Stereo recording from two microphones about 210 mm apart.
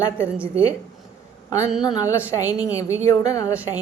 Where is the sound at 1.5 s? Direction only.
15° left (ahead or behind).